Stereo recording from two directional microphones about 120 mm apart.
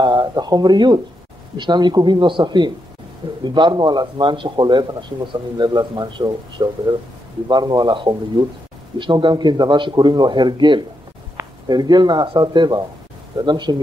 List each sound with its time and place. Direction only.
0.0 s speech: 35° right (ahead or behind)